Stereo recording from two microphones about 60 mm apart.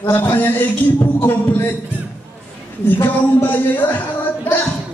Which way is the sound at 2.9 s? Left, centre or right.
Left.